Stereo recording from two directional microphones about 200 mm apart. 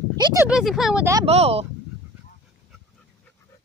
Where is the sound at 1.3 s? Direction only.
30° right (ahead or behind).